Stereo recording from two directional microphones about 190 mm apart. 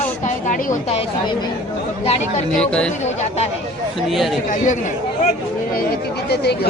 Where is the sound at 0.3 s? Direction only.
40° left (ahead or behind).